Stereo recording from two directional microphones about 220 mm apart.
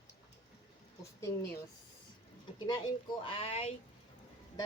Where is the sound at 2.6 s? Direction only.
20° left (ahead or behind).